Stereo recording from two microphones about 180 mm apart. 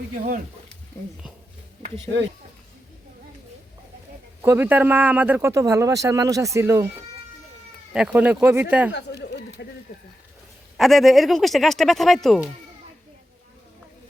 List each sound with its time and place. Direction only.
4.4 s a man's voice: 15° right (ahead or behind)
7.9 s a man's voice: 5° right (ahead or behind)
8.9 s a sound: 70° left (ahead or behind)
10.8 s speech: centre (ahead or behind)